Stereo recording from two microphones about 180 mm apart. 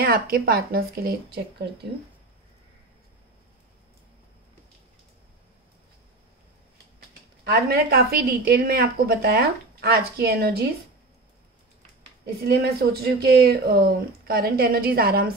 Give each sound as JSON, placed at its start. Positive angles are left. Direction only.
{"t": 0.0, "sound": "speech", "side_deg": -55}
{"t": 7.4, "sound": "speech", "side_deg": -60}
{"t": 12.4, "sound": "speech", "side_deg": -60}